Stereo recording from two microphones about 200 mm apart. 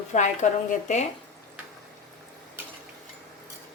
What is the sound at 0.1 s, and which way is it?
Speech, 35° left (ahead or behind).